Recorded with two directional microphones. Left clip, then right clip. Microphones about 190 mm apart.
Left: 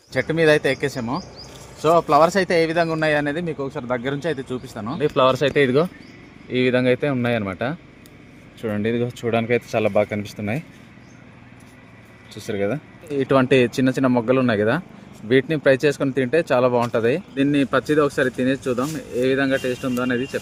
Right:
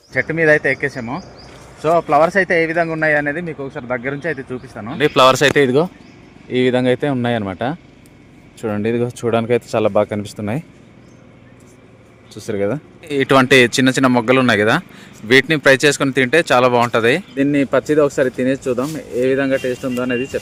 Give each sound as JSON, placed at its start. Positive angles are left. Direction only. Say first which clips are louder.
{"t": 0.1, "sound": "speech", "louder": "right 3 dB", "side_deg": 0}
{"t": 12.3, "sound": "speech", "louder": "right 4 dB", "side_deg": -15}
{"t": 13.1, "sound": "speech", "louder": "right 5 dB", "side_deg": -5}